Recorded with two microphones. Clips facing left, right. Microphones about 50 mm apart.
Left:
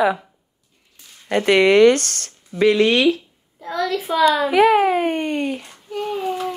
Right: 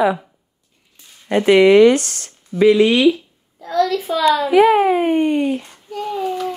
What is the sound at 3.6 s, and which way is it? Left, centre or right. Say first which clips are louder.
Speech: right 5 dB; centre.